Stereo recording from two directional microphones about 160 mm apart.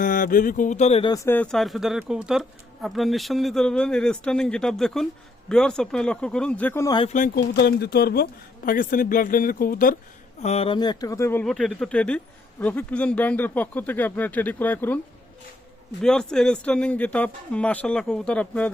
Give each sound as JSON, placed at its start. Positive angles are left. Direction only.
{"t": 0.0, "sound": "speech", "side_deg": 60}
{"t": 1.0, "sound": "speech", "side_deg": 20}
{"t": 6.8, "sound": "speech", "side_deg": 30}
{"t": 7.3, "sound": "speech", "side_deg": 90}
{"t": 10.4, "sound": "speech", "side_deg": 40}
{"t": 10.8, "sound": "speech", "side_deg": 25}
{"t": 11.4, "sound": "speech", "side_deg": 5}
{"t": 16.0, "sound": "speech", "side_deg": 5}